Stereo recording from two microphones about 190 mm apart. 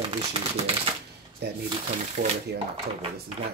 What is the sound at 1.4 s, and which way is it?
Speech, 60° right (ahead or behind).